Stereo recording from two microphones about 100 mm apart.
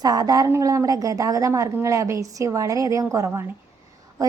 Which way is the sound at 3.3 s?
20° right (ahead or behind).